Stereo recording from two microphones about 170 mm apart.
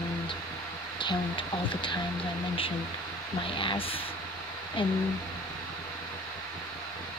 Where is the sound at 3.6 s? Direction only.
30° left (ahead or behind).